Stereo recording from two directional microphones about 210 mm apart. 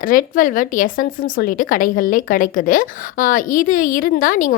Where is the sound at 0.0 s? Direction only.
40° left (ahead or behind).